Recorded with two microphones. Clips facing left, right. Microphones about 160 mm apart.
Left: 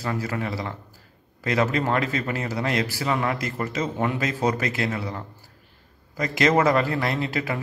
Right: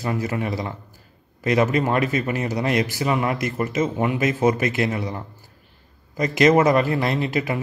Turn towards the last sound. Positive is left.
turn(degrees=-20)  # may be behind; listen again after turning